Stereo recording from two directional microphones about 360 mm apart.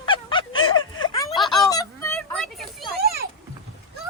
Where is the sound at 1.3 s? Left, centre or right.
Centre.